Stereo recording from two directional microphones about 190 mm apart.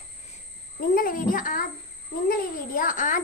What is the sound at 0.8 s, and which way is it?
Speech, 50° left (ahead or behind).